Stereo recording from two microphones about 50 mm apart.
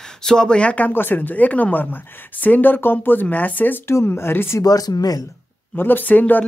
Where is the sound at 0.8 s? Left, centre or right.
Left.